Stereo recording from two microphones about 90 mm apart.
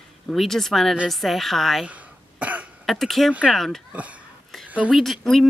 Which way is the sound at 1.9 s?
15° right (ahead or behind).